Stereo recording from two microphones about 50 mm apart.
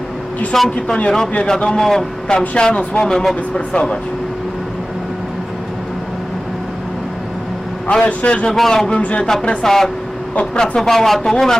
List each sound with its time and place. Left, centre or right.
0.5 s speech: centre
2.6 s speech: centre
7.9 s a man's voice: left
8.4 s speech: centre
9.0 s a man's voice: left
9.2 s speech: centre
9.6 s speech: centre